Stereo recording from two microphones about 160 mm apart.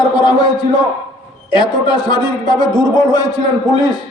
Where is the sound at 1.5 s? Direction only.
30° left (ahead or behind).